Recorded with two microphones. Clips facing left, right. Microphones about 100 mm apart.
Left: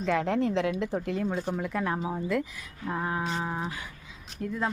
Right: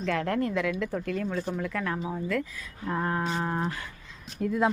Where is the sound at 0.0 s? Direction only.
20° left (ahead or behind).